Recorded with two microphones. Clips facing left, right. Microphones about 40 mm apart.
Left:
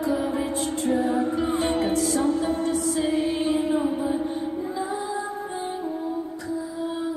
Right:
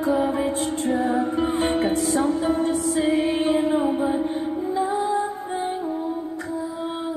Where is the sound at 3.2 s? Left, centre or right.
Right.